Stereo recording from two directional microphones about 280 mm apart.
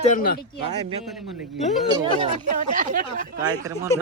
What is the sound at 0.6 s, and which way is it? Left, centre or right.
Speech, right.